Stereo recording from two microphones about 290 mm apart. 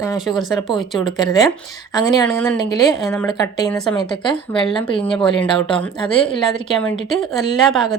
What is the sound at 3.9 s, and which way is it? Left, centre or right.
Speech, centre.